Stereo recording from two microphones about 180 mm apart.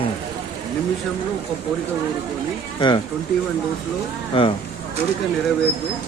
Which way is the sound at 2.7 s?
25° left (ahead or behind).